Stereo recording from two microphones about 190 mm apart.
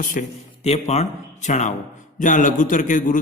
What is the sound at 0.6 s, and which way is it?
A man's voice, 35° left (ahead or behind).